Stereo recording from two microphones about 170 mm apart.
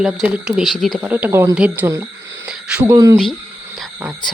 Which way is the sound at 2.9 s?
20° right (ahead or behind).